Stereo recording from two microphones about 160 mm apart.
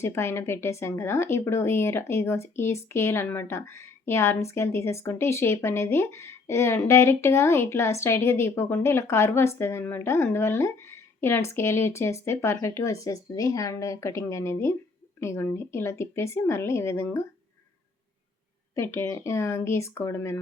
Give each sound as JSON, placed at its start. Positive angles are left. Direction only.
{"t": 0.0, "sound": "speech", "side_deg": 15}
{"t": 18.7, "sound": "speech", "side_deg": 15}